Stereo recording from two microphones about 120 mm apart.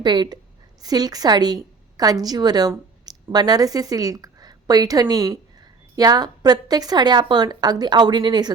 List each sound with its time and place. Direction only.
0.0 s a woman's voice: 40° right (ahead or behind)